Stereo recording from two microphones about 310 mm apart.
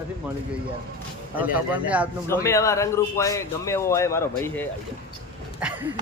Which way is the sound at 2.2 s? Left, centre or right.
Centre.